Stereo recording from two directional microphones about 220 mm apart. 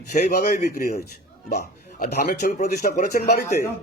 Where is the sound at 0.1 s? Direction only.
35° left (ahead or behind).